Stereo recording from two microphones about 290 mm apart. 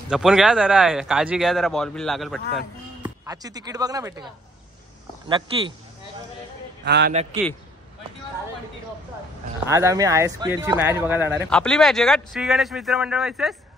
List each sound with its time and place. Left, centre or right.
0.1 s speech: centre
3.0 s speech: centre
6.8 s a man's voice: right
9.7 s speech: centre